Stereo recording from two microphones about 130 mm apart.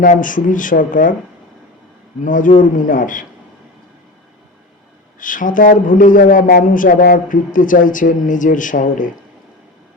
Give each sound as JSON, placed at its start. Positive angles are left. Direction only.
{"t": 0.0, "sound": "speech", "side_deg": 90}
{"t": 2.2, "sound": "speech", "side_deg": 90}
{"t": 5.2, "sound": "speech", "side_deg": 90}